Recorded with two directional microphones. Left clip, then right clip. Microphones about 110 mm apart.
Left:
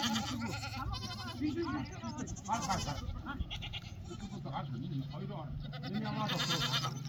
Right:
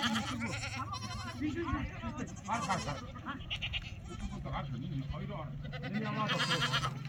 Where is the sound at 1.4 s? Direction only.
30° right (ahead or behind).